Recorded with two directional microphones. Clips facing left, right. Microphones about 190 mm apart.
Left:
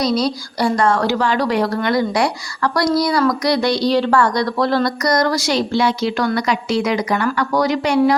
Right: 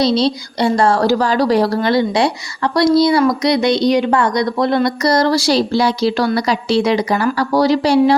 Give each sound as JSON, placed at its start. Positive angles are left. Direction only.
{"t": 0.0, "sound": "a woman's voice", "side_deg": -25}